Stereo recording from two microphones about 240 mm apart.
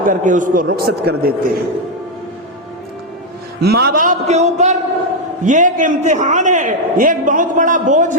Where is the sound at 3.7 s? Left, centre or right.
Right.